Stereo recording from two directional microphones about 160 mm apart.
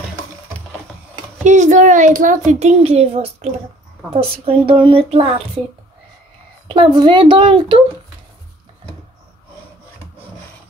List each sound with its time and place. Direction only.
1.4 s speech: 50° right (ahead or behind)
6.7 s speech: 30° right (ahead or behind)